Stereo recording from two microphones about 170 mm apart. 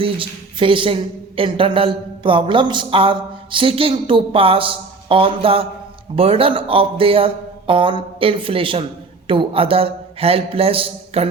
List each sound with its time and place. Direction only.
0.0 s speech: 30° right (ahead or behind)